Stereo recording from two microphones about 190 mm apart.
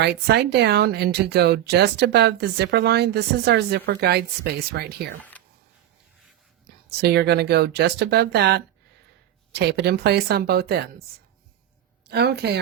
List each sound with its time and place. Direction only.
0.0 s speech: 60° right (ahead or behind)
7.0 s speech: 60° right (ahead or behind)
12.0 s speech: 60° right (ahead or behind)